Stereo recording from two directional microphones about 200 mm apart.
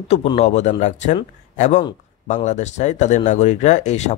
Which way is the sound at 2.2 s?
35° left (ahead or behind).